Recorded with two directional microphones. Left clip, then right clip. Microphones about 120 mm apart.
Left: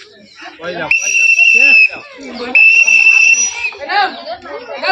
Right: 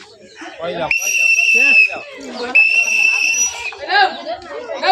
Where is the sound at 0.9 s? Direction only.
55° right (ahead or behind).